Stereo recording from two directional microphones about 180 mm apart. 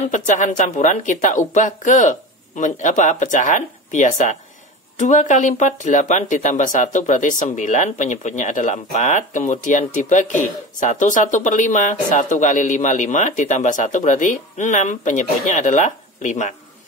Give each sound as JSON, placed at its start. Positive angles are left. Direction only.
{"t": 0.1, "sound": "speech", "side_deg": 45}